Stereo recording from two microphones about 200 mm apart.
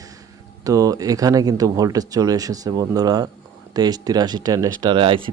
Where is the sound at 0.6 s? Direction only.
15° right (ahead or behind).